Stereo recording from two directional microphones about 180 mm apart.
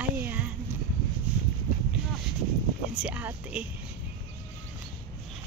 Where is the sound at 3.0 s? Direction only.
5° right (ahead or behind).